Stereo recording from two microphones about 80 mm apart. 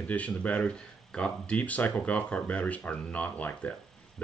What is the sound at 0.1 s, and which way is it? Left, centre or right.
Speech, centre.